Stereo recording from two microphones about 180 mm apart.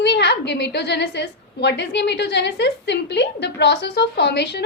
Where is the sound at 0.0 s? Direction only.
70° left (ahead or behind).